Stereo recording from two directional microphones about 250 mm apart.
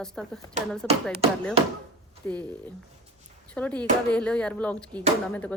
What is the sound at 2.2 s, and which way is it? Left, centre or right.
Speech, centre.